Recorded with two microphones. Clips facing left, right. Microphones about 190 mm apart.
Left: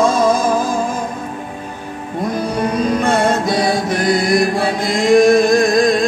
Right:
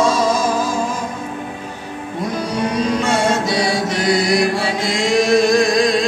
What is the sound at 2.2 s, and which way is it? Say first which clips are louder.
Music: left 2 dB; 55° left (ahead or behind).